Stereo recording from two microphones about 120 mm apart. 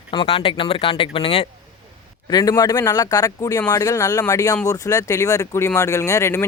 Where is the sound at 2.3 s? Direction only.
30° left (ahead or behind).